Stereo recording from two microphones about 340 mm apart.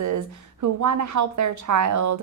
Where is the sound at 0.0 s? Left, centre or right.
Right.